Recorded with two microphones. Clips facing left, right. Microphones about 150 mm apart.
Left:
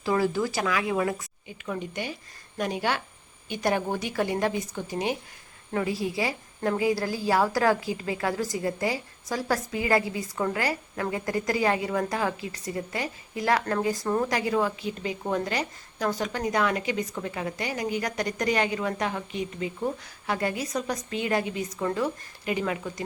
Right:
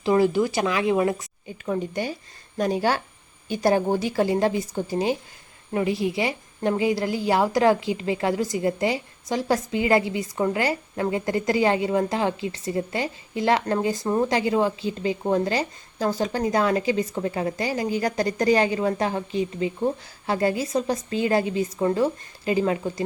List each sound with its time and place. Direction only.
0.0 s a woman's voice: 20° right (ahead or behind)
1.6 s a woman's voice: 40° right (ahead or behind)